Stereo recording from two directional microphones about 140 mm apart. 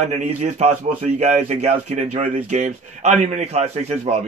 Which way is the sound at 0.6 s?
55° right (ahead or behind).